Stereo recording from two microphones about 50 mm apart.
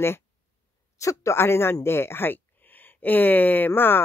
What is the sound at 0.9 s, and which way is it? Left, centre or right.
Speech, left.